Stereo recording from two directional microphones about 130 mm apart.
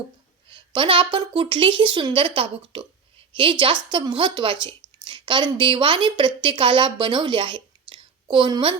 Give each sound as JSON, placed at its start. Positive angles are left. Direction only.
{"t": 0.5, "sound": "a woman's voice", "side_deg": -40}